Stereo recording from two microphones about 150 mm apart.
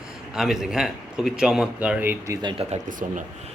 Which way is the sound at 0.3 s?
5° right (ahead or behind).